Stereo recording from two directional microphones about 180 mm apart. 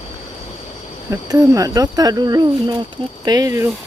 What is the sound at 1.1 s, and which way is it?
Speech, 20° right (ahead or behind).